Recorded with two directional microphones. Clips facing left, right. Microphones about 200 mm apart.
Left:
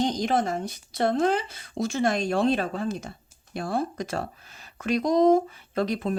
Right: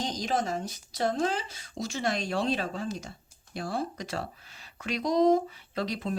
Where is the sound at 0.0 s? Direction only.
60° left (ahead or behind).